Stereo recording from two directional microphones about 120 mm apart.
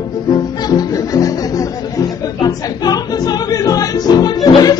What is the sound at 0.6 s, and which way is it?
Music, 30° left (ahead or behind).